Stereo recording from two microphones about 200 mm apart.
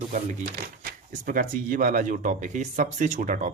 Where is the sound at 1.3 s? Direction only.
40° right (ahead or behind).